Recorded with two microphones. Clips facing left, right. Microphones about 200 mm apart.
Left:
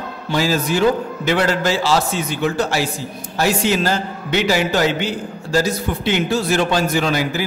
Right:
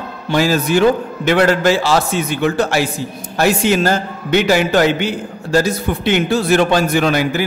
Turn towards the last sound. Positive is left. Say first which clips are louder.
# right 4 dB
turn(degrees=-60)  # may be behind; listen again after turning